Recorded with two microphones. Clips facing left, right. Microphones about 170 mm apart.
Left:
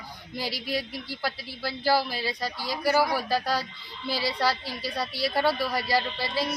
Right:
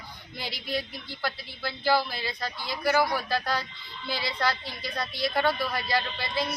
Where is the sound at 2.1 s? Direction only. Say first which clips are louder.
Left 3 dB; 40° left (ahead or behind).